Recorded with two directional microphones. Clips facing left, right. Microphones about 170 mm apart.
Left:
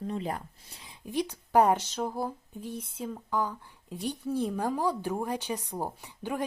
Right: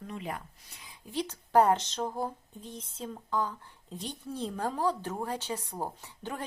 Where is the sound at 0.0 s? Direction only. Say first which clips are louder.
Left 5 dB; 35° left (ahead or behind).